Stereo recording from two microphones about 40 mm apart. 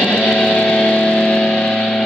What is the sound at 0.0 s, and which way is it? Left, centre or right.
Music, centre.